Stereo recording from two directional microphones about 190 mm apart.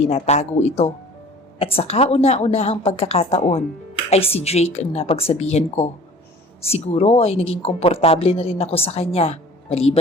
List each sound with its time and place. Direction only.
0.0 s a woman's voice: 35° left (ahead or behind)